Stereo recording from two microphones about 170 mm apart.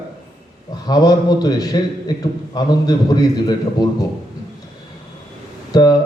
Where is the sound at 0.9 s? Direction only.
20° left (ahead or behind).